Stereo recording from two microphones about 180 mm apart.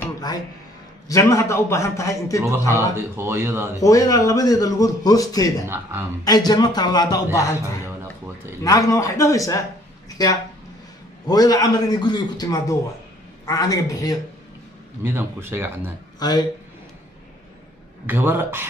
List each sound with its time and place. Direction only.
1.0 s a man's voice: 15° left (ahead or behind)
3.0 s speech: 15° right (ahead or behind)
3.7 s a man's voice: 20° left (ahead or behind)
5.7 s speech: 10° right (ahead or behind)
6.2 s a man's voice: 20° left (ahead or behind)
8.6 s a man's voice: 20° left (ahead or behind)
15.0 s speech: 10° right (ahead or behind)
16.2 s a man's voice: 20° left (ahead or behind)
18.0 s speech: 10° right (ahead or behind)